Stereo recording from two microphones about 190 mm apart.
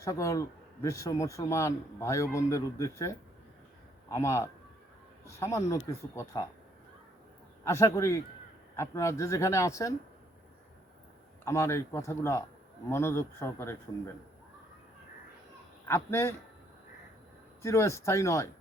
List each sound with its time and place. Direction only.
0.0 s speech: 15° left (ahead or behind)
7.6 s speech: 15° left (ahead or behind)
11.4 s speech: 15° left (ahead or behind)
15.9 s speech: 15° left (ahead or behind)
17.6 s speech: 15° left (ahead or behind)